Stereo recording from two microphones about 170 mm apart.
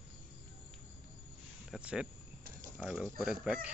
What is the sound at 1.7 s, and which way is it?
Speech, 5° right (ahead or behind).